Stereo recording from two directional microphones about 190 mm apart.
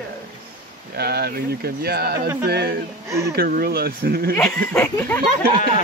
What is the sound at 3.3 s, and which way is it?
Speech, 55° right (ahead or behind).